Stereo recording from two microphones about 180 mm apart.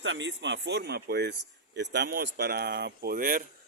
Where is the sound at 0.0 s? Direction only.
90° right; by 3.4 s 50° right (ahead or behind).